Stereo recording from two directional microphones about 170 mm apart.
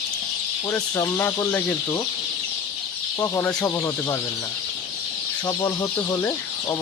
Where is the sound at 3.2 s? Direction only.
15° left (ahead or behind).